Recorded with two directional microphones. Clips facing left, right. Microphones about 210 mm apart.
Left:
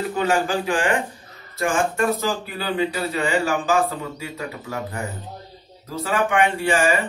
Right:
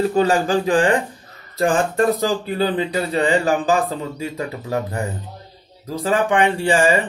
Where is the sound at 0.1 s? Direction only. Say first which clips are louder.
Right 4 dB; 35° right (ahead or behind).